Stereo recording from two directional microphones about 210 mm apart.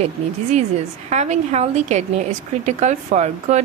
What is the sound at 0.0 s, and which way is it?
A woman's voice, 35° right (ahead or behind).